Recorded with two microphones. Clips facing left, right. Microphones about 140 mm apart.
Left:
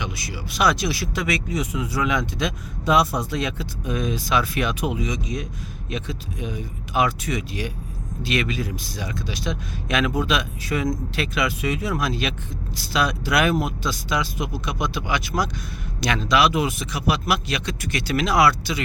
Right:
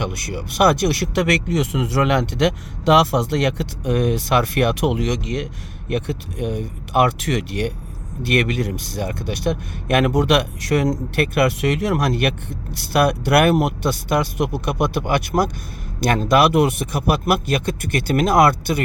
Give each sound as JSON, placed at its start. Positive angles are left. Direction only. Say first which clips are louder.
{"t": 0.0, "sound": "speech", "louder": "right 6 dB", "side_deg": -60}
{"t": 5.9, "sound": "speech", "louder": "right 7 dB", "side_deg": -65}